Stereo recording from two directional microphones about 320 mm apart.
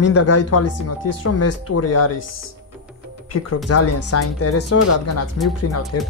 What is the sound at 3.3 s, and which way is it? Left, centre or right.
Speech, left.